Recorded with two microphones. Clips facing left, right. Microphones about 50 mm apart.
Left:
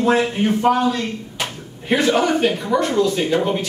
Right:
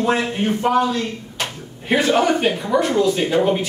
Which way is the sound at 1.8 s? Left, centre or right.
Centre.